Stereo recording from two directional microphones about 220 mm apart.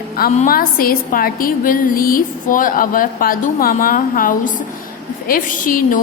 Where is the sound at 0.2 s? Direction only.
40° left (ahead or behind).